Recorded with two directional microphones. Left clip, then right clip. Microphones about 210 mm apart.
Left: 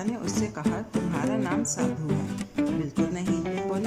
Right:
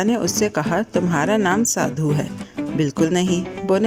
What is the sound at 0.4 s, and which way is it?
Speech, 40° right (ahead or behind).